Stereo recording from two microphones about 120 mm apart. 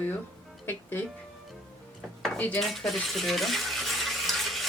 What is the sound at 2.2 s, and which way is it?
Dishes, 10° left (ahead or behind).